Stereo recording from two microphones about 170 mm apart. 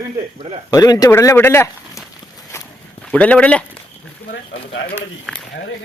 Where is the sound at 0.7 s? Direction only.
20° left (ahead or behind).